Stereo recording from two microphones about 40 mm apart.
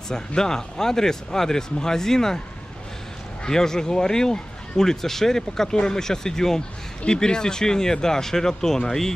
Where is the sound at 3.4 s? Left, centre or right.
Centre.